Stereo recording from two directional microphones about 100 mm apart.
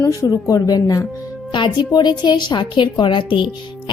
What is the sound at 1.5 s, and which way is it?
A woman's voice, 50° left (ahead or behind).